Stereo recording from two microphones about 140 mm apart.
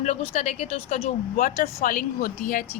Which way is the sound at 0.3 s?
50° left (ahead or behind).